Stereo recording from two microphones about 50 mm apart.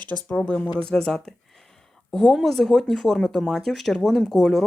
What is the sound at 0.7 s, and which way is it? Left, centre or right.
Speech, centre.